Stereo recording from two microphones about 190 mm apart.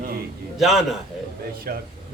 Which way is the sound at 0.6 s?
Centre (ahead or behind).